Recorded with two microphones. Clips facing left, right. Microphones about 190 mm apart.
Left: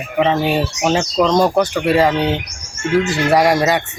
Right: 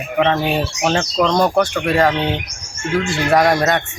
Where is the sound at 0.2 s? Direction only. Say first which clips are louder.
Left 1 dB; 5° left (ahead or behind).